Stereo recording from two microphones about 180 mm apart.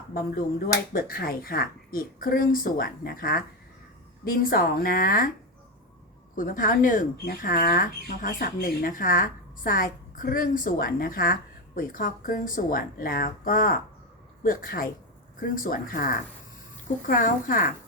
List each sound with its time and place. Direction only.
0.1 s speech: 55° left (ahead or behind)
6.3 s speech: 50° left (ahead or behind)